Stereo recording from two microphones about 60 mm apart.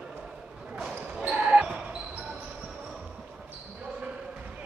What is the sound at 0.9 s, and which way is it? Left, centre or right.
Basketball bounce, centre.